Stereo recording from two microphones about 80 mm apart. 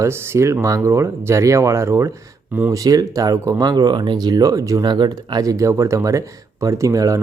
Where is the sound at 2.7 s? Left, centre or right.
Right.